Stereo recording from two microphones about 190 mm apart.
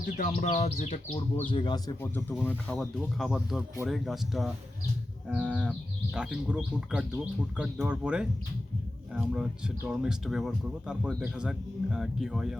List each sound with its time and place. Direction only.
0.0 s speech: 40° left (ahead or behind); by 1.8 s 25° left (ahead or behind)
2.4 s speech: 10° left (ahead or behind)